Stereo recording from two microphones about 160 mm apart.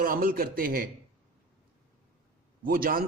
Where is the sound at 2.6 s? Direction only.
65° right (ahead or behind).